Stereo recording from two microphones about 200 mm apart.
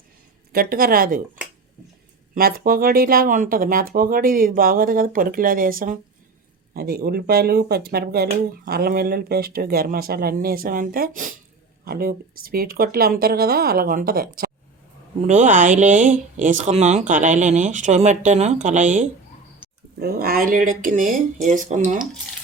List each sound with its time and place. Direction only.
0.5 s speech: 45° right (ahead or behind)
2.3 s speech: 45° right (ahead or behind)
19.6 s dog: 5° right (ahead or behind)
20.0 s speech: 50° right (ahead or behind)